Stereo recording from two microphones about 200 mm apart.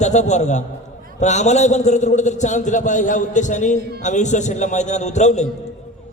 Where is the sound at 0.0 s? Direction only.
35° left (ahead or behind).